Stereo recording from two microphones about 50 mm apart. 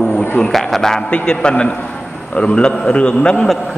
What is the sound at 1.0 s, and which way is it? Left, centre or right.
A man's voice, centre.